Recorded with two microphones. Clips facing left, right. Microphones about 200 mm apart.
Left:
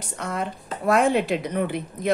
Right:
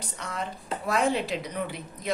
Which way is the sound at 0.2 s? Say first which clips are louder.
Left 6 dB; 55° left (ahead or behind).